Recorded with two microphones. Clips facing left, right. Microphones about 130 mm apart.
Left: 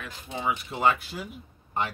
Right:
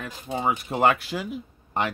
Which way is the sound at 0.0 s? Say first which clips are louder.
Right 4 dB; 45° right (ahead or behind).